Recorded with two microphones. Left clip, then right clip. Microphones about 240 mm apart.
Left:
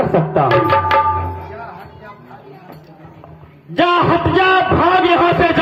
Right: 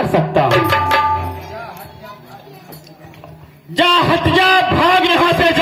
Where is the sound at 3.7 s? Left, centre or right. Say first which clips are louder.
Right 1 dB; right.